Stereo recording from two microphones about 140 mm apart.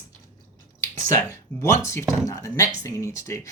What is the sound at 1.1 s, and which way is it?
Speech, 20° left (ahead or behind).